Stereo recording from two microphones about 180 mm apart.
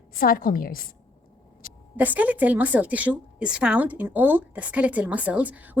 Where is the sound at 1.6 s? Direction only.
50° left (ahead or behind).